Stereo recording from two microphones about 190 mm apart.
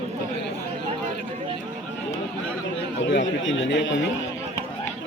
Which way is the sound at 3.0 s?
75° left (ahead or behind).